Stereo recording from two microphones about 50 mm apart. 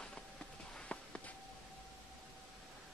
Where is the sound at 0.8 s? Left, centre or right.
Left.